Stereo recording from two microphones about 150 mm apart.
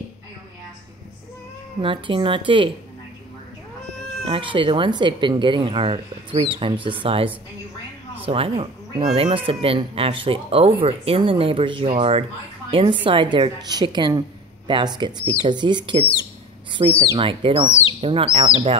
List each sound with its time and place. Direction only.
1.8 s speech: 35° right (ahead or behind)
4.3 s speech: 35° right (ahead or behind)
8.3 s speech: 40° right (ahead or behind)
16.8 s speech: 45° right (ahead or behind)